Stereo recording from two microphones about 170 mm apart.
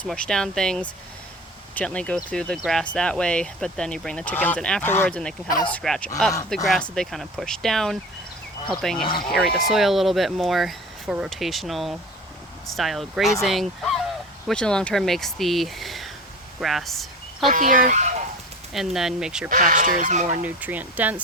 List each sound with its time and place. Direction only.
0.0 s speech: 5° left (ahead or behind)
5.5 s speech: 25° left (ahead or behind)
5.7 s speech: 5° left (ahead or behind)
17.5 s speech: 50° right (ahead or behind)
18.7 s speech: centre (ahead or behind)
19.5 s speech: 50° right (ahead or behind)
20.4 s speech: 10° right (ahead or behind)